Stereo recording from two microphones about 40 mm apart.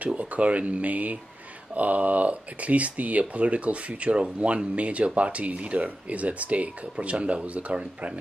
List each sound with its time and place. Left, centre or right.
0.1 s speech: right